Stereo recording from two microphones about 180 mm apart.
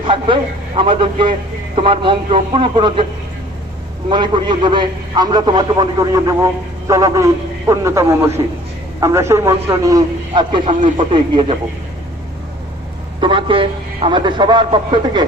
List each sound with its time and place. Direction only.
0.8 s a man's voice: 30° right (ahead or behind)
4.1 s a man's voice: 25° right (ahead or behind)
13.1 s a man's voice: 30° right (ahead or behind)